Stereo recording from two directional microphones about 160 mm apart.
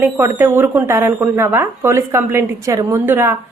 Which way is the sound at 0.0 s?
15° right (ahead or behind).